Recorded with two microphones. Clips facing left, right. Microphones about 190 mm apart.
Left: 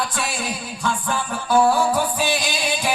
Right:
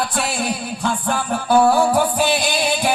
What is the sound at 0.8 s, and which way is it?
Music, 35° right (ahead or behind).